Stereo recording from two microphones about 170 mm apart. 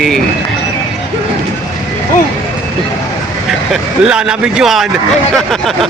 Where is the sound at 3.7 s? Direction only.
5° right (ahead or behind).